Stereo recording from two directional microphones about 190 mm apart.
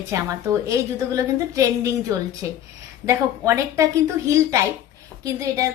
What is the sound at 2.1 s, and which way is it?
A woman's voice, 15° right (ahead or behind).